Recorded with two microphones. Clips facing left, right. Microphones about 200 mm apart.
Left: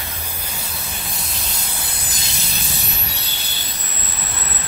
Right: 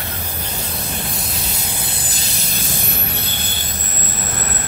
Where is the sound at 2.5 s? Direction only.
50° right (ahead or behind).